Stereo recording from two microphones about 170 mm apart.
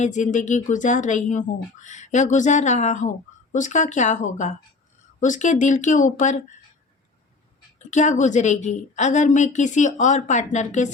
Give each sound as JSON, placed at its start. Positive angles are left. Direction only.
{"t": 0.0, "sound": "a woman's voice", "side_deg": 45}
{"t": 7.8, "sound": "a woman's voice", "side_deg": 45}